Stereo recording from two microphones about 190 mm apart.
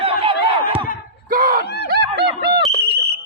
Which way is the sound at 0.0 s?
30° right (ahead or behind).